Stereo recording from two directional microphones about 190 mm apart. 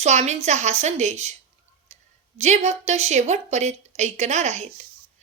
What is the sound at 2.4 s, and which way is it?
A woman's voice, 35° right (ahead or behind).